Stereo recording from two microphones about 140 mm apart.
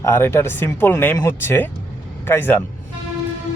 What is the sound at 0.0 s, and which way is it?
Speech, 15° left (ahead or behind).